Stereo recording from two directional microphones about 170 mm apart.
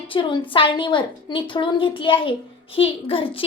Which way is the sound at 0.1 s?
30° left (ahead or behind).